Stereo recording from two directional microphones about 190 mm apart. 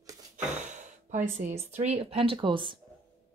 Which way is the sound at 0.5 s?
40° right (ahead or behind).